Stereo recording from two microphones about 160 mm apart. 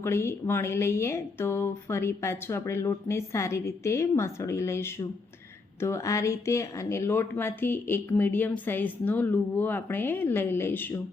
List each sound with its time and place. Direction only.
0.0 s speech: 15° left (ahead or behind)